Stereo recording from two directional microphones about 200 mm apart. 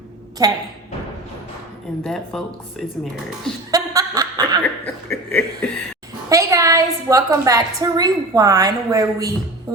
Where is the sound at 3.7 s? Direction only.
15° right (ahead or behind).